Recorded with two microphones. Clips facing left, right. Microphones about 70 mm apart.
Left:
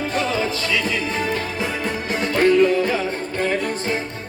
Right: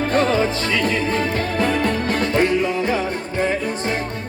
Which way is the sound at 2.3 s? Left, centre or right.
Right.